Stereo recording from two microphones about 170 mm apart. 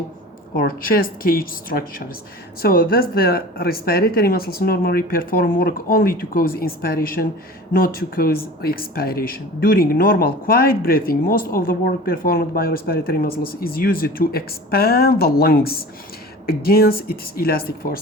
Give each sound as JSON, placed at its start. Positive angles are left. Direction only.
{"t": 0.5, "sound": "speech", "side_deg": 60}